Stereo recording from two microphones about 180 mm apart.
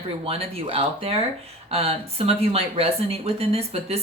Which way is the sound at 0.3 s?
35° right (ahead or behind).